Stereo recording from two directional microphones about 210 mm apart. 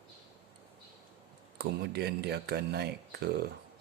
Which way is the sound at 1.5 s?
50° right (ahead or behind).